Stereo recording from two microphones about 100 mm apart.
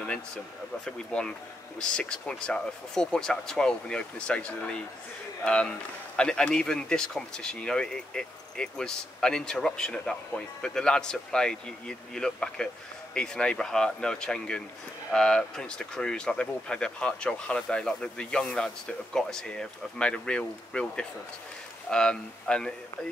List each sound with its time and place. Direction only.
0.8 s speech: 10° left (ahead or behind)